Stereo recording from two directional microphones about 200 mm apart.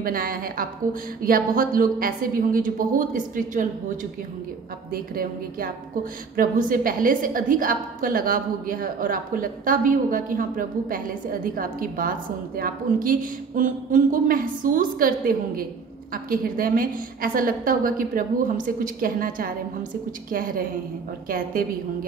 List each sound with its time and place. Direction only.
0.0 s a woman's voice: 45° right (ahead or behind)